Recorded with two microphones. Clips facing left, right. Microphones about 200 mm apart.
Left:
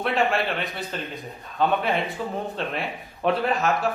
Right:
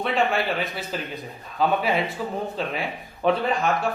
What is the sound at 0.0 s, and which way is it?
Speech, centre (ahead or behind).